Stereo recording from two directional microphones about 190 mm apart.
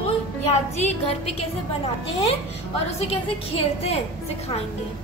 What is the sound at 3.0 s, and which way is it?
A woman's voice, 30° left (ahead or behind).